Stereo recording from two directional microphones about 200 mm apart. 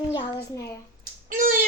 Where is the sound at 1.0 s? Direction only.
40° right (ahead or behind).